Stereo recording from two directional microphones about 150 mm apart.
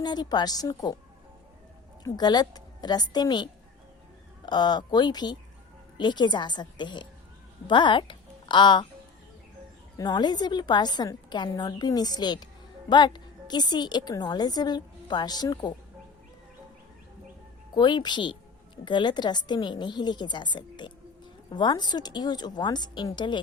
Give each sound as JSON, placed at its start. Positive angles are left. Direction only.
{"t": 0.0, "sound": "a woman's voice", "side_deg": 30}
{"t": 2.0, "sound": "a woman's voice", "side_deg": 30}
{"t": 10.0, "sound": "a woman's voice", "side_deg": 30}
{"t": 17.7, "sound": "a woman's voice", "side_deg": 30}